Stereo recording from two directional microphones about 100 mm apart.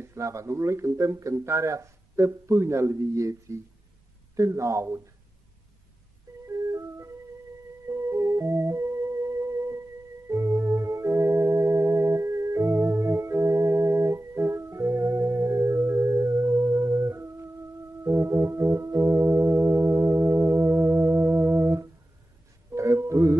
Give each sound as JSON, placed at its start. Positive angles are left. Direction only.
{"t": 0.0, "sound": "speech", "side_deg": -30}
{"t": 6.4, "sound": "ice cream truck", "side_deg": -30}
{"t": 7.9, "sound": "music", "side_deg": -30}
{"t": 10.2, "sound": "organ", "side_deg": -30}
{"t": 18.0, "sound": "keyboard", "side_deg": -30}
{"t": 22.7, "sound": "music", "side_deg": -30}